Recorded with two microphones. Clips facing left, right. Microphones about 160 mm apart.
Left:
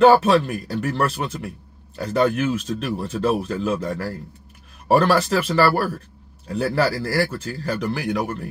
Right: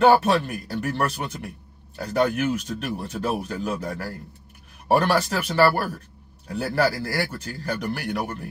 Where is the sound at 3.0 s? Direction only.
90° left.